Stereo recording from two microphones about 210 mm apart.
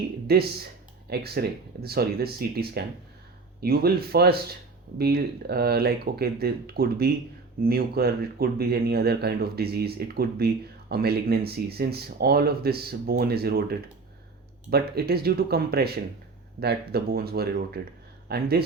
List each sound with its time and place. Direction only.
0.3 s speech: 50° right (ahead or behind)